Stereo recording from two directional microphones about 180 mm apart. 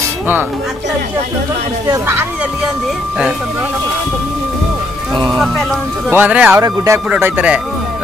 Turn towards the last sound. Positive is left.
turn(degrees=-10)  # may be behind; listen again after turning